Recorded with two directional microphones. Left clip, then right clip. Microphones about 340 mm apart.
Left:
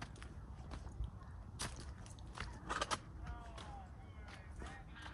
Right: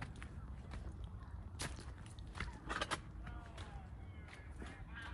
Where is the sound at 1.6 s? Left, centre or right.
Centre.